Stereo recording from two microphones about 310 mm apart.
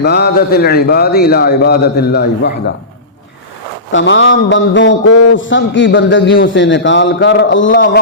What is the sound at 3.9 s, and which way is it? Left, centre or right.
Speech, left.